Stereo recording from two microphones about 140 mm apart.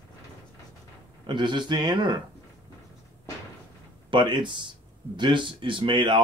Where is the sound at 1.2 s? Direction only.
35° right (ahead or behind).